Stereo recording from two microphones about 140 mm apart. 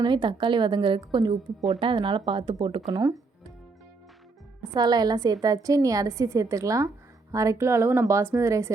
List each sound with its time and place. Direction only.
0.0 s a woman's voice: 35° right (ahead or behind)
4.6 s a woman's voice: 30° right (ahead or behind)